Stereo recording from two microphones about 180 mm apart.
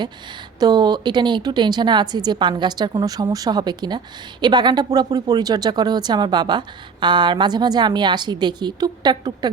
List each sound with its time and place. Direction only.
0.6 s speech: 25° right (ahead or behind)